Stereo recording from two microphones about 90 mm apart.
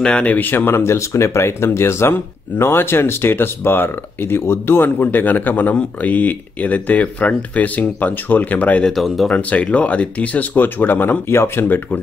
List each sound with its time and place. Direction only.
0.0 s speech: 15° left (ahead or behind)
8.9 s speech: centre (ahead or behind)
9.3 s speech: 15° left (ahead or behind)